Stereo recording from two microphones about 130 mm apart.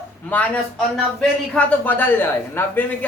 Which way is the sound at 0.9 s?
5° left (ahead or behind).